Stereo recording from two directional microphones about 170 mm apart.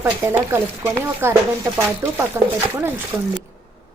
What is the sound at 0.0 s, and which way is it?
A woman's voice, 10° right (ahead or behind).